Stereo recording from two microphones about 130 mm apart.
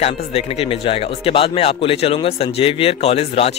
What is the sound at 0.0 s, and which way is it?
Speech, 50° left (ahead or behind).